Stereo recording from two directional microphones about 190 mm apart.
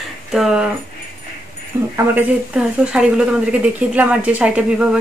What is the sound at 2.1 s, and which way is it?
Speech, 5° right (ahead or behind).